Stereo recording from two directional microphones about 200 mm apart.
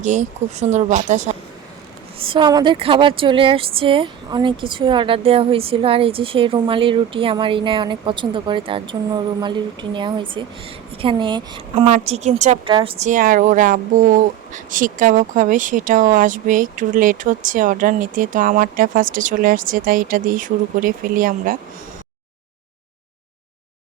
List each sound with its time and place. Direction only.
0.0 s a woman's voice: 35° right (ahead or behind)
11.9 s a woman's voice: 35° right (ahead or behind)